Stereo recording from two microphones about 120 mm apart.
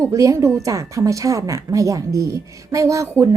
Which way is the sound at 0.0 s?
25° right (ahead or behind).